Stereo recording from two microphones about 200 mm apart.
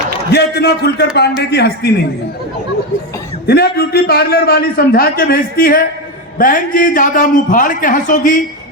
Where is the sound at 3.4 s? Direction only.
50° left (ahead or behind).